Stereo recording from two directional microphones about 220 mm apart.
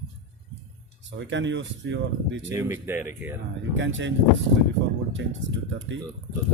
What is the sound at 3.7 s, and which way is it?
Speech, 55° right (ahead or behind).